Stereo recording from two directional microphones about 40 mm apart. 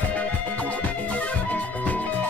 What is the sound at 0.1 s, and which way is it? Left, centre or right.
Music, left.